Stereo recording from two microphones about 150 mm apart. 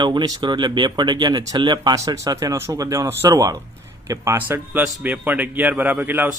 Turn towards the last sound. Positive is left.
turn(degrees=-15)  # may be behind; listen again after turning